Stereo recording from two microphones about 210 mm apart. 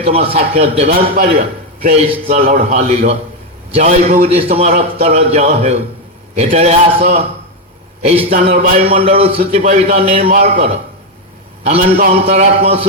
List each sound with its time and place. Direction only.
0.0 s a man's voice: 30° right (ahead or behind)
8.3 s a man's voice: 40° right (ahead or behind)
8.8 s a man's voice: 25° right (ahead or behind)